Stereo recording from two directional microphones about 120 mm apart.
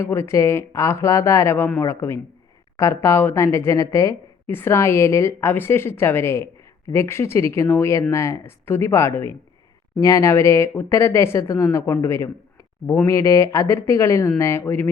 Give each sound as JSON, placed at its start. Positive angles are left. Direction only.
{"t": 0.0, "sound": "a woman's voice", "side_deg": 20}